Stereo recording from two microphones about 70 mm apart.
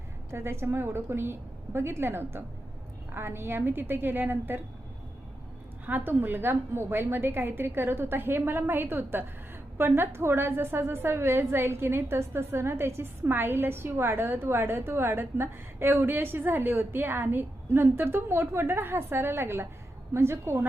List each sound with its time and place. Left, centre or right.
0.3 s a woman's voice: right
5.8 s a woman's voice: right